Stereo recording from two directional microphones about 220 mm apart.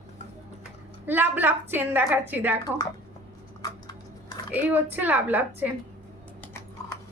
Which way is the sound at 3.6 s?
15° left (ahead or behind).